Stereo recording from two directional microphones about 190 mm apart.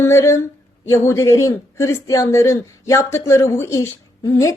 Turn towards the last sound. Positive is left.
turn(degrees=15)  # may be behind; listen again after turning